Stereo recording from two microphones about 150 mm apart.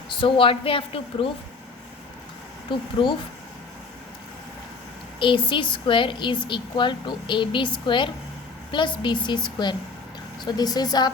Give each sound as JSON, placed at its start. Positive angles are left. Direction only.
{"t": 0.1, "sound": "a woman's voice", "side_deg": 35}
{"t": 3.0, "sound": "a woman's voice", "side_deg": 35}
{"t": 5.2, "sound": "a woman's voice", "side_deg": 35}